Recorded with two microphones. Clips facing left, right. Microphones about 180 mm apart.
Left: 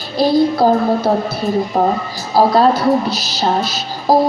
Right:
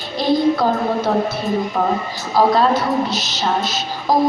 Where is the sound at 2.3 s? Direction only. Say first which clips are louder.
Left 3 dB; 35° left (ahead or behind).